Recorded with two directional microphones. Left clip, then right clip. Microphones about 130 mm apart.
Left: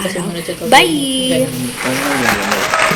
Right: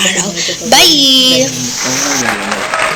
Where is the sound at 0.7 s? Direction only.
25° right (ahead or behind).